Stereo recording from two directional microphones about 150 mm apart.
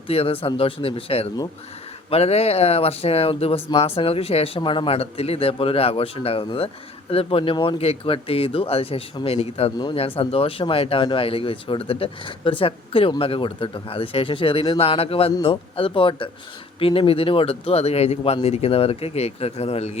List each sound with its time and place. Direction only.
0.1 s speech: 40° left (ahead or behind)